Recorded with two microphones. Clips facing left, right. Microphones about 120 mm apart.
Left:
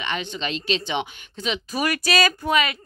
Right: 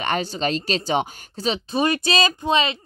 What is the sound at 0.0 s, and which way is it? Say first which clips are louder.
Speech: right 5 dB; 40° right (ahead or behind).